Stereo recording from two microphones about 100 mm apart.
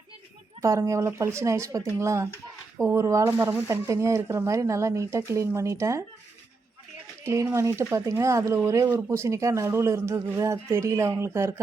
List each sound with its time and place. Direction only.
0.6 s a man's voice: 30° right (ahead or behind)
7.5 s a man's voice: 30° right (ahead or behind)